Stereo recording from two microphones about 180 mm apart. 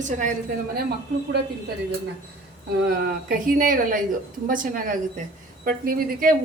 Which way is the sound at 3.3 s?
50° right (ahead or behind).